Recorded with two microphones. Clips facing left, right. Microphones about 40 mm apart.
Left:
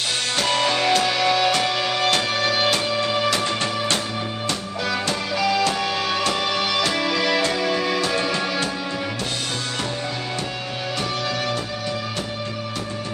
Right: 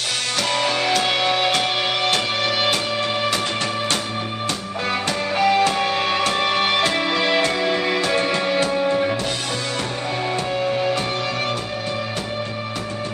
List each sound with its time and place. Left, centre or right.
0.4 s music: left
0.7 s music: right
5.0 s music: right